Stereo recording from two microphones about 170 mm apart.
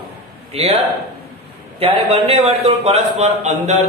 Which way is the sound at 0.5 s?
35° right (ahead or behind).